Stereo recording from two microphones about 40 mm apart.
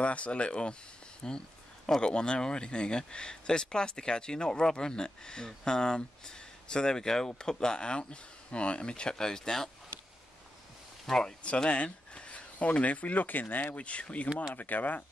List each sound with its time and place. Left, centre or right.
0.0 s speech: left; by 9.7 s centre
11.1 s speech: centre
11.4 s speech: left
13.7 s speech: left
14.5 s speech: left